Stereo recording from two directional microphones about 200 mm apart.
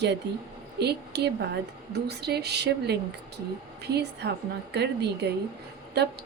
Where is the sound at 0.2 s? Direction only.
60° right (ahead or behind).